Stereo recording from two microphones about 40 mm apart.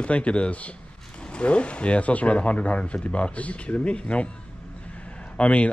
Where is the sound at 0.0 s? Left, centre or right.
Left.